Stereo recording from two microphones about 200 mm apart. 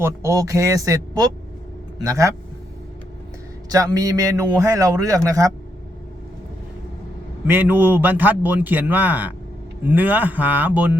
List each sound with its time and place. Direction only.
0.0 s a man's voice: 15° right (ahead or behind)
3.7 s a man's voice: 15° right (ahead or behind)
7.4 s a man's voice: 10° right (ahead or behind)